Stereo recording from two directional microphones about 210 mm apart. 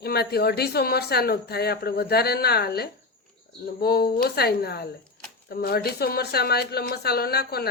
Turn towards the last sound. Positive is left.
turn(degrees=50)  # may be behind; listen again after turning